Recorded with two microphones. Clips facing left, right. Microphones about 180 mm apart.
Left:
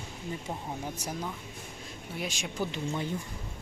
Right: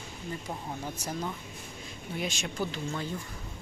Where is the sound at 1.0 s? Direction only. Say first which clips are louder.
Right 1 dB; 5° left (ahead or behind).